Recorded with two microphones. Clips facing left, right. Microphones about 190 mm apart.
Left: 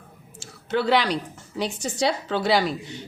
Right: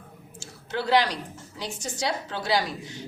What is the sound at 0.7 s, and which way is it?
A woman's voice, 65° left (ahead or behind).